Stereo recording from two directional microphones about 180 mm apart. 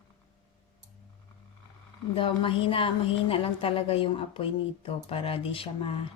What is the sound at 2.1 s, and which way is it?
A woman's voice, 30° left (ahead or behind).